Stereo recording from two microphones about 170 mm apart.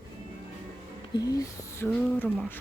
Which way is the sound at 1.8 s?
10° left (ahead or behind).